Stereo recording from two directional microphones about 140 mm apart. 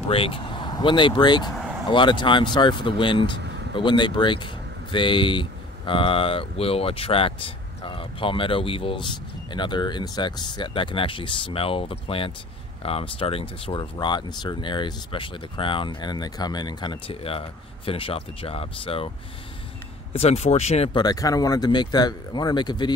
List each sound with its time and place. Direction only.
0.1 s speech: 40° left (ahead or behind)
13.9 s speech: 30° left (ahead or behind); by 20.9 s 50° left (ahead or behind)
20.9 s speech: 30° left (ahead or behind)